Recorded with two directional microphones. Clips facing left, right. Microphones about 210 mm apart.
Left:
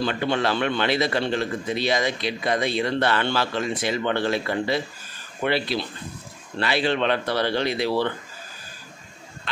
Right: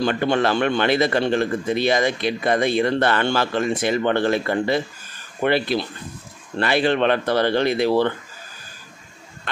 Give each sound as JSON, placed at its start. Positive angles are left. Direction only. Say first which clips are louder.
{"t": 0.0, "sound": "a man's voice", "louder": "right 4 dB", "side_deg": -50}